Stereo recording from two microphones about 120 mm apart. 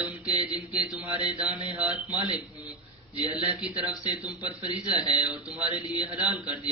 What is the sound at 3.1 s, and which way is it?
Speech, 40° left (ahead or behind).